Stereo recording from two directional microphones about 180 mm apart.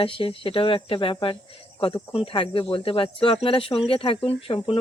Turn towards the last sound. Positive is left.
turn(degrees=30)  # may be behind; listen again after turning